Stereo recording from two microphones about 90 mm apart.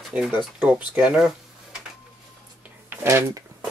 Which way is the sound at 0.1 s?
10° right (ahead or behind).